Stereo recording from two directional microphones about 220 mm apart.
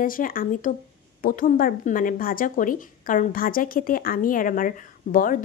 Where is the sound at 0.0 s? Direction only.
40° left (ahead or behind).